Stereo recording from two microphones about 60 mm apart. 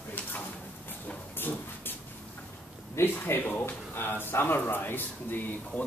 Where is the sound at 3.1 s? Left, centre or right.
Left.